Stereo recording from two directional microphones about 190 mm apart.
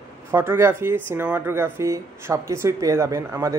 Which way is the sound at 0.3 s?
15° right (ahead or behind).